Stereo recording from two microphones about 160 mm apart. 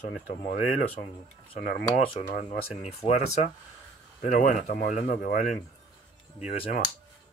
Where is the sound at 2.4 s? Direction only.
40° left (ahead or behind).